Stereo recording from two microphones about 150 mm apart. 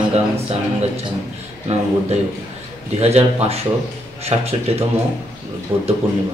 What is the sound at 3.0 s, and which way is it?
Speech, 45° right (ahead or behind).